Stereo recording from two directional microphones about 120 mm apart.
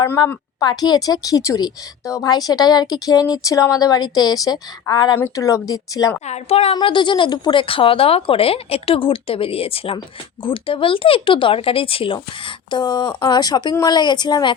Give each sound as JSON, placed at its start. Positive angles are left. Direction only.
{"t": 0.6, "sound": "a woman's voice", "side_deg": 35}
{"t": 6.2, "sound": "a woman's voice", "side_deg": 60}
{"t": 6.7, "sound": "speech", "side_deg": 40}